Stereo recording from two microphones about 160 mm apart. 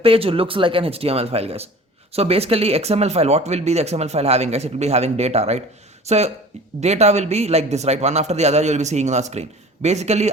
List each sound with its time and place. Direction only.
0.0 s a man's voice: 35° right (ahead or behind)